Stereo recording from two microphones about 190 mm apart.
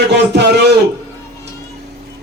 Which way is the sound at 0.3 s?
60° right (ahead or behind).